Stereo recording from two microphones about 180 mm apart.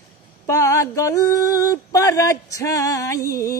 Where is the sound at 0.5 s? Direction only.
15° left (ahead or behind).